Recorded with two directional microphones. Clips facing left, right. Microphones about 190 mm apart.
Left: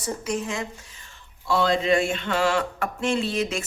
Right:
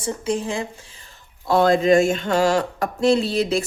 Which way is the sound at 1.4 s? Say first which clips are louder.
Right 6 dB; 50° right (ahead or behind).